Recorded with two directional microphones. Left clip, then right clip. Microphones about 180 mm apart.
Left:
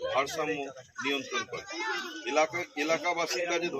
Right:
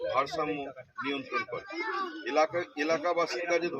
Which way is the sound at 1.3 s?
40° right (ahead or behind).